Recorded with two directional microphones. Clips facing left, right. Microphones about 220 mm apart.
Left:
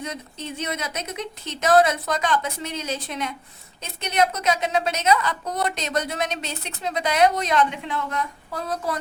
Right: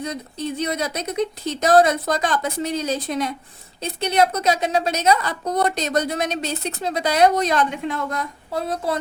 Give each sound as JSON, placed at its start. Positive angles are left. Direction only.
{"t": 0.0, "sound": "a woman's voice", "side_deg": -35}